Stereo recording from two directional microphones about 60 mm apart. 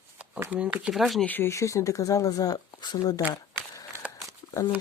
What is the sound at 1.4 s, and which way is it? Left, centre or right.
Speech, left.